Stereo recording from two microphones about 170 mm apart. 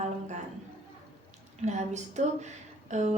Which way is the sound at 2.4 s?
45° right (ahead or behind).